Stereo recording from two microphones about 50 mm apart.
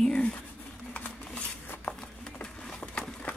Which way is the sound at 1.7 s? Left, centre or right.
Left.